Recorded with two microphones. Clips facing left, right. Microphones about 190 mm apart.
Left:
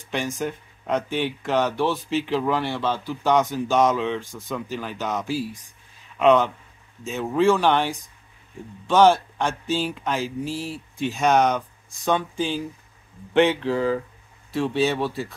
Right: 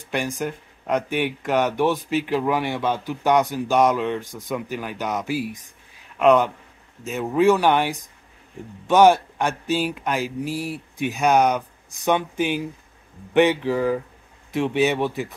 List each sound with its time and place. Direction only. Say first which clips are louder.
0.1 s speech: right 1 dB; 10° right (ahead or behind)